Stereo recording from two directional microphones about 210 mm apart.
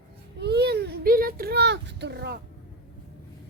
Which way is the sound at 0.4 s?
50° right (ahead or behind).